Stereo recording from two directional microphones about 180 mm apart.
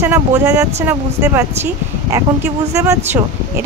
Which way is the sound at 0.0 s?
15° right (ahead or behind).